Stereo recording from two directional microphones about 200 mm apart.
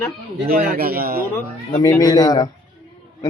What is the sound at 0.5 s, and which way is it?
Speech, 45° right (ahead or behind).